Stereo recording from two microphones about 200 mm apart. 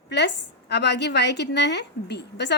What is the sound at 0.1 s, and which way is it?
A woman's voice, 60° left (ahead or behind).